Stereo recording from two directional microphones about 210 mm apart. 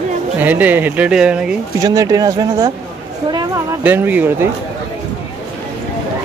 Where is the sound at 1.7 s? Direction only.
15° right (ahead or behind).